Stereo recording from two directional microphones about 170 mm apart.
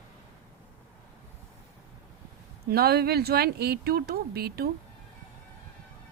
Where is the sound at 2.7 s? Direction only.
65° right (ahead or behind).